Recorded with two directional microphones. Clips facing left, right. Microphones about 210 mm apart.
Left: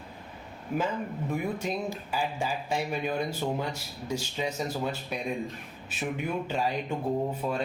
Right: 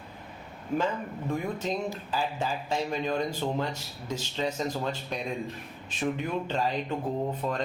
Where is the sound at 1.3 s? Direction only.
10° left (ahead or behind).